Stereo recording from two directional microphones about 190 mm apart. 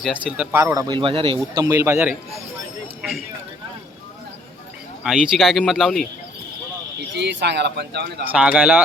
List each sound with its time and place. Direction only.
0.0 s speech: 5° right (ahead or behind)
5.0 s speech: 5° right (ahead or behind)
7.2 s speech: 65° right (ahead or behind)
8.3 s speech: 5° right (ahead or behind)